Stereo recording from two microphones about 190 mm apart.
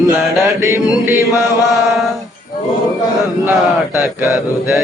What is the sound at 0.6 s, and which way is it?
Chant, 10° right (ahead or behind).